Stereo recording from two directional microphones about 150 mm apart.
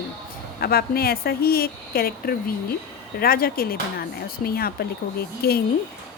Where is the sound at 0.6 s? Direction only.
90° left.